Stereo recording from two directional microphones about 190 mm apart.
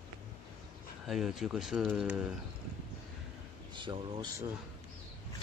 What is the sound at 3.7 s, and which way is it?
Speech, 25° right (ahead or behind).